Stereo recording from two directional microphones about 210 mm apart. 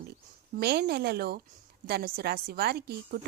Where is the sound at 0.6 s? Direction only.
50° right (ahead or behind).